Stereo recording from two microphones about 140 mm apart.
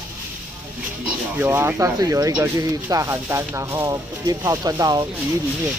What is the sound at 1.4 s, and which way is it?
Speech, 15° right (ahead or behind).